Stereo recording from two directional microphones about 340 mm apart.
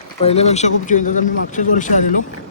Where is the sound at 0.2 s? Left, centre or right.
Centre.